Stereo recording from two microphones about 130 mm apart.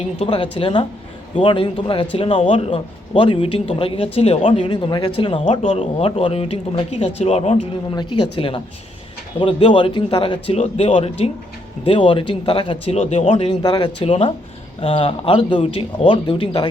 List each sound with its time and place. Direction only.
0.2 s a man's voice: 45° left (ahead or behind)
7.9 s a man's voice: 40° left (ahead or behind)
13.6 s speech: 35° left (ahead or behind)
14.0 s a man's voice: 45° left (ahead or behind)